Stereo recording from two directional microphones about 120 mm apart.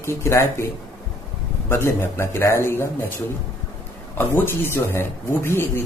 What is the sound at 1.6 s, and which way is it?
Speech, 20° left (ahead or behind).